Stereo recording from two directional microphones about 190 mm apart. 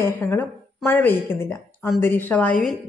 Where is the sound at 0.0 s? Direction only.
10° left (ahead or behind).